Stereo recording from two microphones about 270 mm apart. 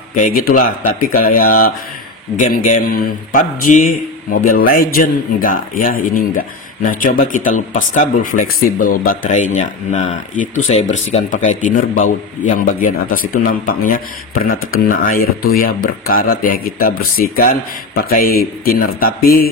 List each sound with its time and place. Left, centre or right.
0.1 s a man's voice: left